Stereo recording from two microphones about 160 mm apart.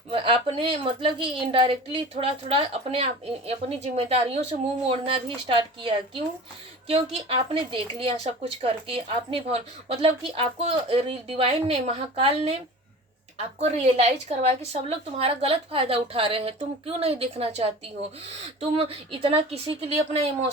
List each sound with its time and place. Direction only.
0.1 s speech: 35° right (ahead or behind)
13.6 s speech: 40° right (ahead or behind)